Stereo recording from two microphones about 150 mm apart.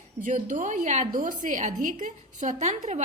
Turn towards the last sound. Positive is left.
turn(degrees=-50)  # may be behind; listen again after turning